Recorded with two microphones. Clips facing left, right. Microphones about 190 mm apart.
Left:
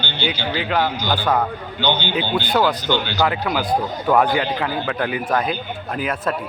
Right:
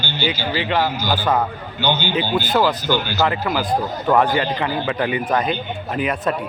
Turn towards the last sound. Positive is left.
turn(degrees=0)  # may be behind; listen again after turning